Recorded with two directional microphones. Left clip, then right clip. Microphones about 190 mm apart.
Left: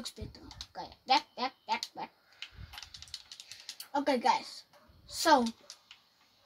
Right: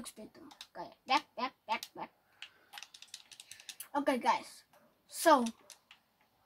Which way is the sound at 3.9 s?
20° left (ahead or behind).